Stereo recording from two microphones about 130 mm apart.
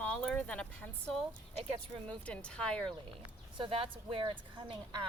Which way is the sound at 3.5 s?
40° right (ahead or behind).